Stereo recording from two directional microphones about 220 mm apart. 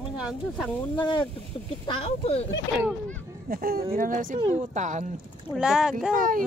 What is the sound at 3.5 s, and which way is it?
Speech, 45° right (ahead or behind).